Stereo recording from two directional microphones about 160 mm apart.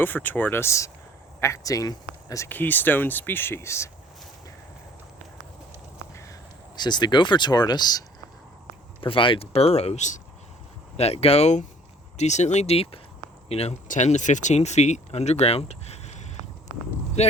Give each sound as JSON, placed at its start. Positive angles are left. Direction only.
{"t": 0.0, "sound": "speech", "side_deg": 10}
{"t": 6.7, "sound": "speech", "side_deg": 25}